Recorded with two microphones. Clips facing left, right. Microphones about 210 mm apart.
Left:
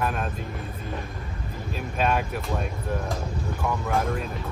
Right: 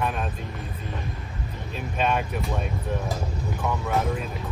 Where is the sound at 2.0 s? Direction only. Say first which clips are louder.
Even; centre (ahead or behind).